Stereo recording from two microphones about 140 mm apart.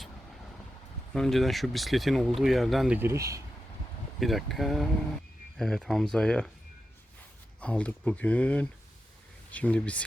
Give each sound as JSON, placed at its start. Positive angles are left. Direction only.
{"t": 1.1, "sound": "speech", "side_deg": 0}
{"t": 3.1, "sound": "speech", "side_deg": -20}
{"t": 4.2, "sound": "speech", "side_deg": 0}
{"t": 7.6, "sound": "speech", "side_deg": 10}